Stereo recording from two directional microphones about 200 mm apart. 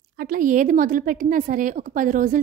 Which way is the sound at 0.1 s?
50° right (ahead or behind).